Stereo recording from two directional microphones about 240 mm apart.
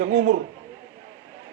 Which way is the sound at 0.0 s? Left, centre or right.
Right.